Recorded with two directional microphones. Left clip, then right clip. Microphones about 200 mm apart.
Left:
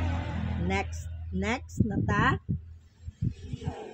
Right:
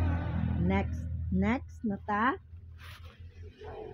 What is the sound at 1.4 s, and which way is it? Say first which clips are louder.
Speech: left 3 dB; 25° right (ahead or behind).